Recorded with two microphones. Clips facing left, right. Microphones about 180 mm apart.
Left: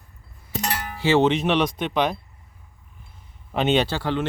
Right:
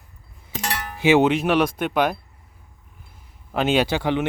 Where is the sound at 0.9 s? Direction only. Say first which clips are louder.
Right 2 dB; 15° right (ahead or behind).